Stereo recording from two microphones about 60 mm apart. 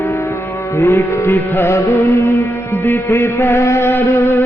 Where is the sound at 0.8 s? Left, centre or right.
Left.